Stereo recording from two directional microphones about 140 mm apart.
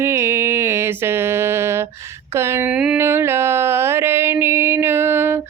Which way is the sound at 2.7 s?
10° right (ahead or behind).